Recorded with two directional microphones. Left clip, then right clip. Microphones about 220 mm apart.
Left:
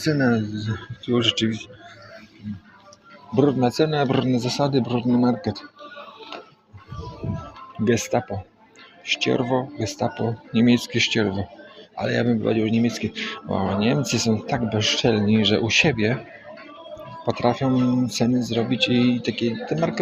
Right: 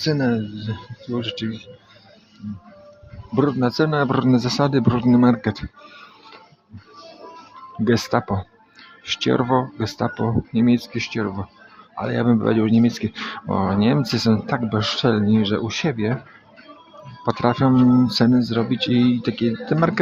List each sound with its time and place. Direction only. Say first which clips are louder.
0.0 s speech: even; 15° right (ahead or behind)
3.3 s speech: even; 20° right (ahead or behind)
7.9 s speech: right 2 dB; 20° right (ahead or behind)
10.5 s speech: left 3 dB; 10° right (ahead or behind)
17.2 s speech: right 2 dB; 20° right (ahead or behind)